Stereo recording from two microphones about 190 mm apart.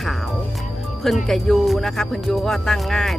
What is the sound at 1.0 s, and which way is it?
Speech, centre (ahead or behind).